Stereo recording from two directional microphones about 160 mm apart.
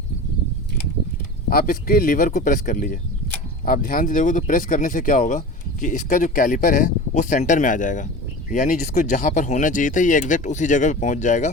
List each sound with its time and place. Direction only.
1.5 s speech: 65° left (ahead or behind)